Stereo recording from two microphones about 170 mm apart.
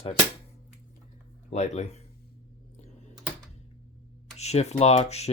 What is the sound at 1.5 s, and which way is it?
Speech, 40° left (ahead or behind).